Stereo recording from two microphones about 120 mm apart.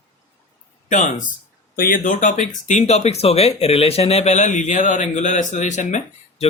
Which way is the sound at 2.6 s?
75° left (ahead or behind).